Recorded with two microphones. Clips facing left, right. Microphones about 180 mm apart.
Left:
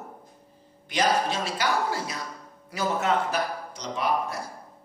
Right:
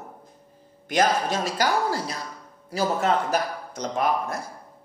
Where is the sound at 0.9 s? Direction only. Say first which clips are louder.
Right 2 dB; 45° right (ahead or behind).